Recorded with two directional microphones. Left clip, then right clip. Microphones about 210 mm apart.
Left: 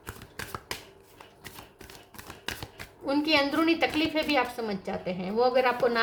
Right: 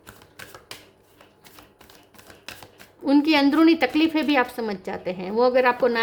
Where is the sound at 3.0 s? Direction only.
45° right (ahead or behind).